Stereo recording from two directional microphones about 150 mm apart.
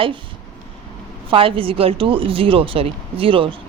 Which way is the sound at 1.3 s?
35° right (ahead or behind).